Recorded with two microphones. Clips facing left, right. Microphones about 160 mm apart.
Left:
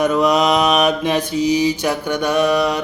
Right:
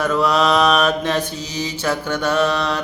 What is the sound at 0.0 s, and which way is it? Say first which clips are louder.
Mantra: left 2 dB; 15° left (ahead or behind).